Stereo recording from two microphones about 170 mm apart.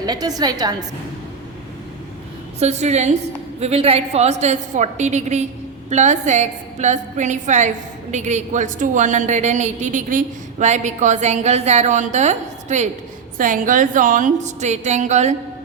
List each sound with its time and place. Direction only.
0.0 s a woman's voice: 20° right (ahead or behind)
2.6 s a woman's voice: 40° right (ahead or behind)